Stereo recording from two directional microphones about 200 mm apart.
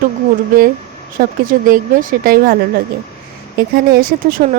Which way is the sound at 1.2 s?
45° right (ahead or behind).